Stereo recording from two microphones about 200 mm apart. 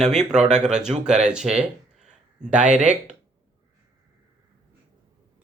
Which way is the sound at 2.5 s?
35° right (ahead or behind).